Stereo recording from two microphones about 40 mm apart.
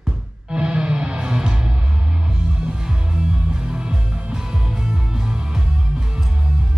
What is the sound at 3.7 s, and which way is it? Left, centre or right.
Music, right.